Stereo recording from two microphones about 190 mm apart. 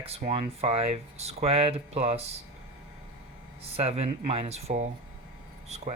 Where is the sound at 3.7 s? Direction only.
30° right (ahead or behind).